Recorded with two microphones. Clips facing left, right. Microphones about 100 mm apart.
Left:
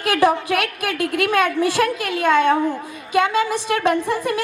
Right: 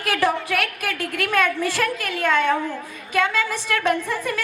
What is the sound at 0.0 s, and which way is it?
A woman's voice, 20° left (ahead or behind).